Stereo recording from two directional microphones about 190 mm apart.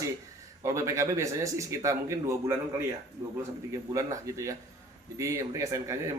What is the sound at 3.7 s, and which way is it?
A man's voice, 15° right (ahead or behind).